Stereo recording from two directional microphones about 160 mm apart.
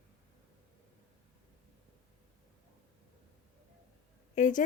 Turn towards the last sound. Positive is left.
turn(degrees=55)  # may be behind; listen again after turning